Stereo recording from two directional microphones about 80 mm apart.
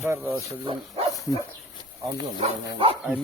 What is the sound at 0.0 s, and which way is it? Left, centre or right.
Speech, right.